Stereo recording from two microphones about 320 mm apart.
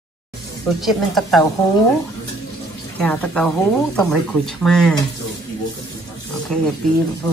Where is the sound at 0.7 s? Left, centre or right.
Centre.